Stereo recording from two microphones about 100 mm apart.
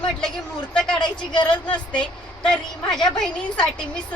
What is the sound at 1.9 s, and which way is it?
A woman's voice, 10° left (ahead or behind).